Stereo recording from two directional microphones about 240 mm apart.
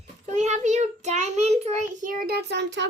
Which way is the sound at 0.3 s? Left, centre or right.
Right.